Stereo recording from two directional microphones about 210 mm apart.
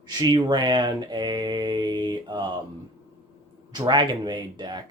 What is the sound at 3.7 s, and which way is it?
Speech, 20° right (ahead or behind).